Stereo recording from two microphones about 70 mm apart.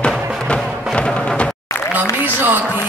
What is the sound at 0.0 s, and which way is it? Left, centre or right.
Music, centre.